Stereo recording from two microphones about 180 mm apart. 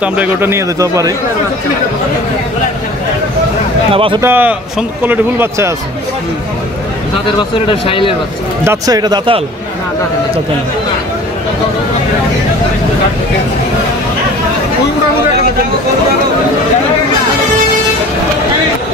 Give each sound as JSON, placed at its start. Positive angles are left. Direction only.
{"t": 0.0, "sound": "a man's voice", "side_deg": -10}
{"t": 3.9, "sound": "speech", "side_deg": -30}
{"t": 4.2, "sound": "a man's voice", "side_deg": -10}
{"t": 7.3, "sound": "speech", "side_deg": 30}
{"t": 8.6, "sound": "speech", "side_deg": -20}